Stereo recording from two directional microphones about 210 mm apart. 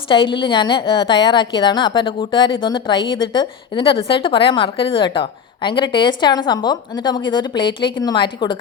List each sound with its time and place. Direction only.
0.1 s a woman's voice: 25° left (ahead or behind)